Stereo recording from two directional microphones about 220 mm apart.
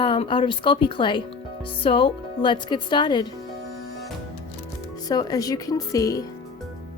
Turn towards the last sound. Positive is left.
turn(degrees=15)  # may be behind; listen again after turning